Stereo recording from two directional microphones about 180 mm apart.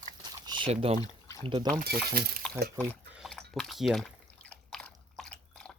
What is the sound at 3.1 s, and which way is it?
Drip, centre (ahead or behind).